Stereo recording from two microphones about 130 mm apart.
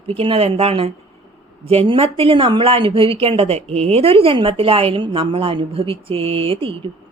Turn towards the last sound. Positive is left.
turn(degrees=-45)  # may be behind; listen again after turning